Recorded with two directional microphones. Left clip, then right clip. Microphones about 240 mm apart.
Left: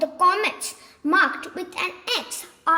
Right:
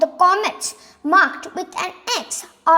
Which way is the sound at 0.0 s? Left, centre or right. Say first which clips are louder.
Right 4 dB; centre.